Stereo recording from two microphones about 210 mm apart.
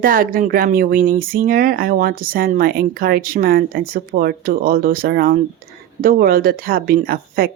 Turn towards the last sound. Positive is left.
turn(degrees=-45)  # may be behind; listen again after turning